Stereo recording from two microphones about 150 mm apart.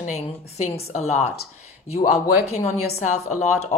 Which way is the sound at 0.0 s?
50° left (ahead or behind).